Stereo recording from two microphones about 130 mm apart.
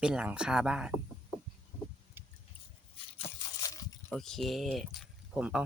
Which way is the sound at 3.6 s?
25° left (ahead or behind).